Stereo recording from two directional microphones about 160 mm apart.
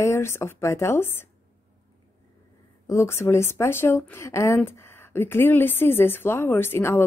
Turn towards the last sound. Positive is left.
turn(degrees=15)  # may be behind; listen again after turning